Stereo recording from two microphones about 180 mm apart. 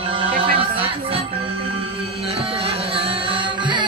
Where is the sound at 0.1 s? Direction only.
30° right (ahead or behind).